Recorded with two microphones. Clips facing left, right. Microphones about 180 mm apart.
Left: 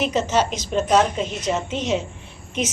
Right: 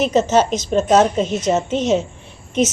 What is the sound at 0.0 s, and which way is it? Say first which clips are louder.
A woman's voice: right 5 dB; 40° right (ahead or behind).